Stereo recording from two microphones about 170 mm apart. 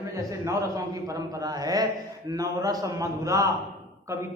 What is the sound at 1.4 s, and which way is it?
A man's voice, 20° right (ahead or behind).